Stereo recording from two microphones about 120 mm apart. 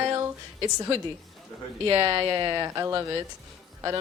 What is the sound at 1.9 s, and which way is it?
A woman's voice, 30° right (ahead or behind).